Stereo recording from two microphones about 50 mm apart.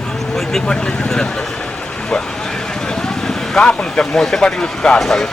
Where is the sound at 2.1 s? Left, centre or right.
Centre.